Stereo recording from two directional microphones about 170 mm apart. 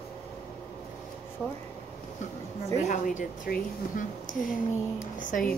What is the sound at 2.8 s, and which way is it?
A woman's voice, 50° left (ahead or behind).